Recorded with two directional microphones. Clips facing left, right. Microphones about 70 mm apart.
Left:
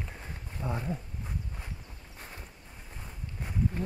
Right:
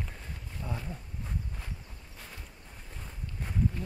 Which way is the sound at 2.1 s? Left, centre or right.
Left.